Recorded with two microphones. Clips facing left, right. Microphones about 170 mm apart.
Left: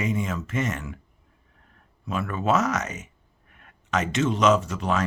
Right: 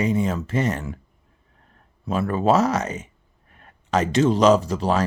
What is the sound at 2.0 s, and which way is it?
Speech, 35° right (ahead or behind).